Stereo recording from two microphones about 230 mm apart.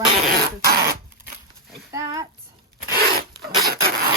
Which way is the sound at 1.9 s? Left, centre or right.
Centre.